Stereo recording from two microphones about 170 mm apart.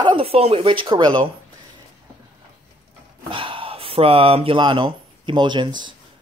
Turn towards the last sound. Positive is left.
turn(degrees=-25)  # may be behind; listen again after turning